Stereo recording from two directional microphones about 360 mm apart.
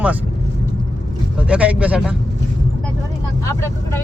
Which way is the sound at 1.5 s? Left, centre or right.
Centre.